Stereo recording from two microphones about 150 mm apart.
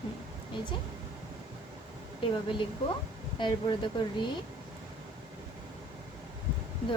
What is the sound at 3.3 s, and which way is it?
Speech, 30° left (ahead or behind).